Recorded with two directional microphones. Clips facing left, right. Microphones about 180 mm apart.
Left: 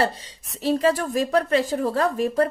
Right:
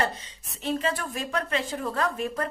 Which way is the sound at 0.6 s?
35° left (ahead or behind).